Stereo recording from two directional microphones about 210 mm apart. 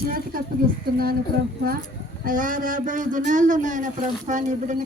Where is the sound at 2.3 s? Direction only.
40° right (ahead or behind).